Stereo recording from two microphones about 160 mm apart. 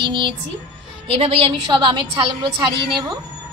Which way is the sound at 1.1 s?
35° right (ahead or behind).